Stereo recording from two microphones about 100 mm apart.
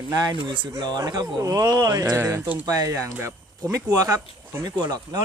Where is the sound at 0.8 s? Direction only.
45° right (ahead or behind).